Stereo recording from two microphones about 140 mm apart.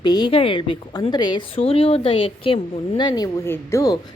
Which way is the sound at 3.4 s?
20° left (ahead or behind).